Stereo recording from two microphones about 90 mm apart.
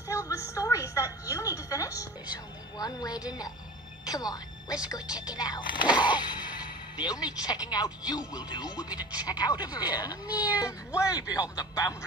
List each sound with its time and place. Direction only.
0.1 s a sound: 35° left (ahead or behind)
2.8 s music: 45° left (ahead or behind)
3.3 s speech: 45° left (ahead or behind)
10.2 s speech: 15° right (ahead or behind)
11.0 s speech: 40° left (ahead or behind)